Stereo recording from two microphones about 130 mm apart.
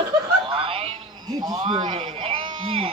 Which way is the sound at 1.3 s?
35° right (ahead or behind).